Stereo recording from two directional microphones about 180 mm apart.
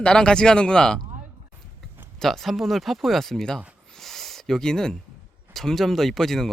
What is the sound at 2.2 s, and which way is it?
Speech, centre (ahead or behind).